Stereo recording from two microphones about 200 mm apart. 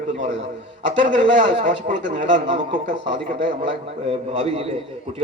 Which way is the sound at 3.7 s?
30° right (ahead or behind).